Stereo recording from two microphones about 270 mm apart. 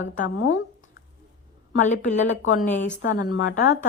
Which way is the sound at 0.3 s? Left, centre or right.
Left.